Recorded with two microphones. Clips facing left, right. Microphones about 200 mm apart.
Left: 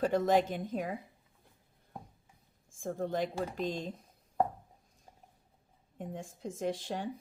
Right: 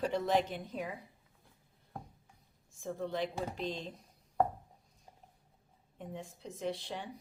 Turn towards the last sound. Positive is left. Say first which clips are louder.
# left 4 dB
turn(degrees=45)  # may be behind; listen again after turning